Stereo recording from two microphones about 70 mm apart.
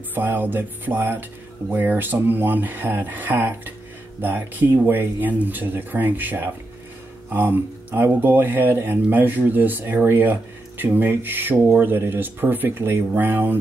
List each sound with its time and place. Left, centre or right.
0.1 s speech: right